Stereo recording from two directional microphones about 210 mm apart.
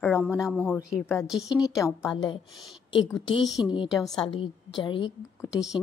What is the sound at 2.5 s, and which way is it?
Speech, centre (ahead or behind).